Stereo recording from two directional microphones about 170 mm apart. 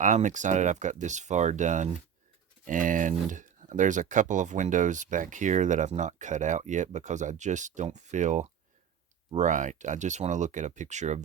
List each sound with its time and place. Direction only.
0.0 s speech: 45° right (ahead or behind)